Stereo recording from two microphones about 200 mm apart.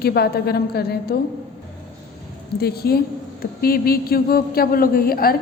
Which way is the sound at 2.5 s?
50° left (ahead or behind).